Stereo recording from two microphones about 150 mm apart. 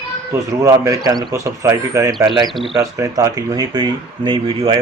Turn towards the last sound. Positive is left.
turn(degrees=-35)  # may be behind; listen again after turning